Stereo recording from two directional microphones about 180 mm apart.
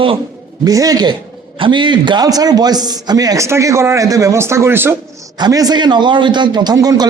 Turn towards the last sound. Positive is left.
turn(degrees=-20)  # may be behind; listen again after turning